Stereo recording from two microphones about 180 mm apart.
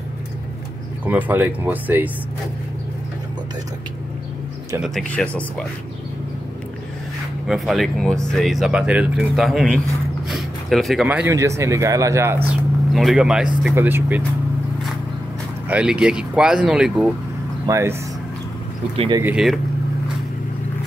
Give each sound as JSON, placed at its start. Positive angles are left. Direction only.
{"t": 1.0, "sound": "speech", "side_deg": -10}
{"t": 4.8, "sound": "speech", "side_deg": 5}
{"t": 7.4, "sound": "speech", "side_deg": 0}
{"t": 12.9, "sound": "speech", "side_deg": 0}
{"t": 15.7, "sound": "speech", "side_deg": -5}
{"t": 17.6, "sound": "speech", "side_deg": -15}
{"t": 18.9, "sound": "speech", "side_deg": -25}
{"t": 19.2, "sound": "speech", "side_deg": 0}